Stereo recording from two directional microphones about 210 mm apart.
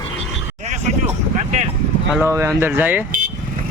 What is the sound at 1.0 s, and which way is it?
Speech, 35° right (ahead or behind).